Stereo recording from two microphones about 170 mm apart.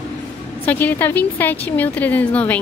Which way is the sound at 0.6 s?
10° left (ahead or behind).